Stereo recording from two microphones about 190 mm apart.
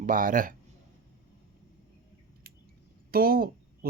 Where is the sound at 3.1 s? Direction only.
50° right (ahead or behind).